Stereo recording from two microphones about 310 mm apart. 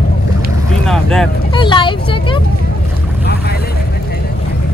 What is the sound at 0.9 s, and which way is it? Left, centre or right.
Vehicle, centre.